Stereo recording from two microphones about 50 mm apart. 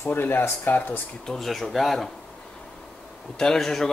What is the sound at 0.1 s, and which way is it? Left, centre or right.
Speech, left.